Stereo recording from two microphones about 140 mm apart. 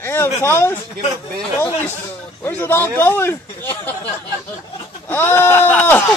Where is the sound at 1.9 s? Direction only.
15° left (ahead or behind).